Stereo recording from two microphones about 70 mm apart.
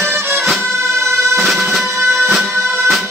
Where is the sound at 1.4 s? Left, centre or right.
Centre.